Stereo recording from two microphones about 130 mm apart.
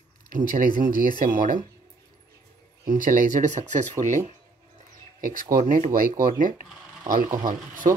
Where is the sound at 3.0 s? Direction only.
90° right; by 3.8 s 70° right (ahead or behind).